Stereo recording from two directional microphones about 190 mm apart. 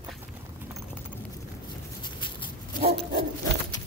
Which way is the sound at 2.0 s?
25° left (ahead or behind).